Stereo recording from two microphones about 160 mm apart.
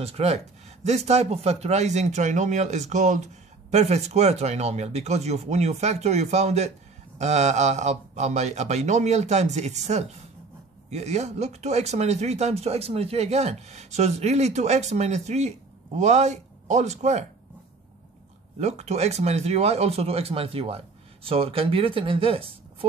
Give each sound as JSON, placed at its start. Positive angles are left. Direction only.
{"t": 0.0, "sound": "speech", "side_deg": -40}
{"t": 18.6, "sound": "speech", "side_deg": -45}